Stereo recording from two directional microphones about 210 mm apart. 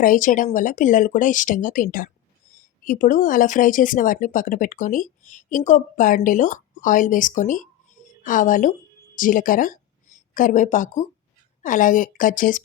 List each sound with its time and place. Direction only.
0.0 s speech: 40° left (ahead or behind)